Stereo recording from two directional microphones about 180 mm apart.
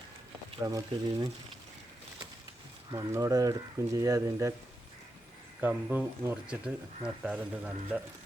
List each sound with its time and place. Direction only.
0.6 s speech: 20° right (ahead or behind)
2.9 s speech: 20° right (ahead or behind)
5.5 s speech: 10° right (ahead or behind)